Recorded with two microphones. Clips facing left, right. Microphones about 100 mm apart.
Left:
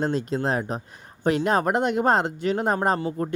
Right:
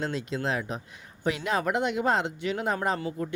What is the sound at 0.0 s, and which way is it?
Speech, 40° left (ahead or behind).